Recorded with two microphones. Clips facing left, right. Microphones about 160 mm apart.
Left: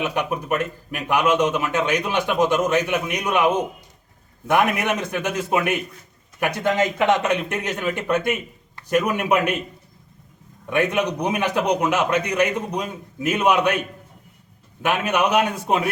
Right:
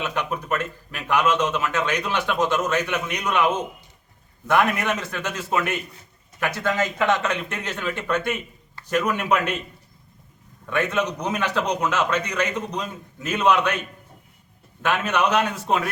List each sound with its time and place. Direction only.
0.0 s speech: 15° left (ahead or behind)
10.7 s speech: 15° left (ahead or behind)